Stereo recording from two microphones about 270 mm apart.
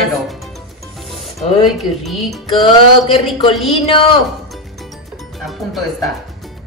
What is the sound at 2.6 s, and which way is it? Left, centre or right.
Music, centre.